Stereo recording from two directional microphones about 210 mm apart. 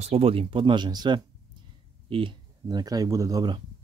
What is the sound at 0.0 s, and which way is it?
Speech, 30° right (ahead or behind).